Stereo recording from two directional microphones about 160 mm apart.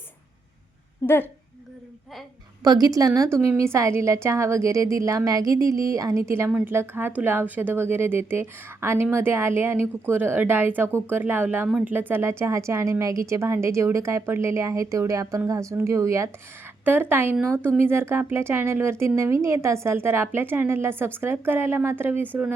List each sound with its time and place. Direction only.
1.0 s speech: 15° left (ahead or behind)
2.6 s a woman's voice: 25° right (ahead or behind)